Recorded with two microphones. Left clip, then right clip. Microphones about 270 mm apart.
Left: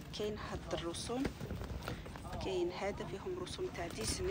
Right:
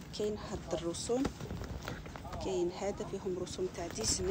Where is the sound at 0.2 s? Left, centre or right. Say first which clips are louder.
Right 4 dB; centre.